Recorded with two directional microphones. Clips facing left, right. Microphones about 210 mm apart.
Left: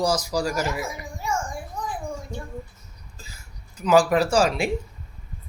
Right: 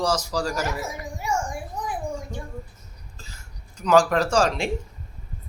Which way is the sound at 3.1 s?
10° left (ahead or behind).